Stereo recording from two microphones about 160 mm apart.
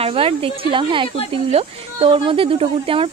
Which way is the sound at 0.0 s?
35° right (ahead or behind).